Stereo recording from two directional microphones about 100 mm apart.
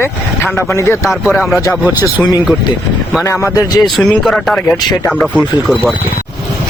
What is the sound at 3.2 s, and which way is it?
Speech, 30° left (ahead or behind).